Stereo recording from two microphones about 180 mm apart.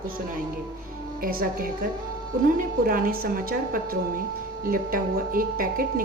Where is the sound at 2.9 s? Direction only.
55° right (ahead or behind).